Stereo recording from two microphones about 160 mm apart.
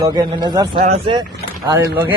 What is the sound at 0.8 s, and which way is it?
Speech, 40° right (ahead or behind).